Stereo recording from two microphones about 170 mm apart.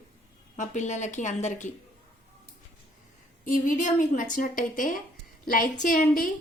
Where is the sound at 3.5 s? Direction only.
50° left (ahead or behind).